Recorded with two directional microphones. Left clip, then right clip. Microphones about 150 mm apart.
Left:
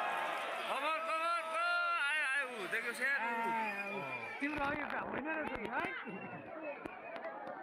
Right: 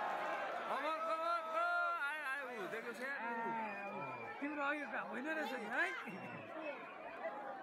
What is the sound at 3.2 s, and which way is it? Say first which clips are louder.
Speech: left 5 dB; 60° left (ahead or behind).